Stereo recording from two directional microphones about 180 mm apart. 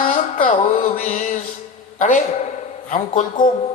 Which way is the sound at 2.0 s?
45° left (ahead or behind).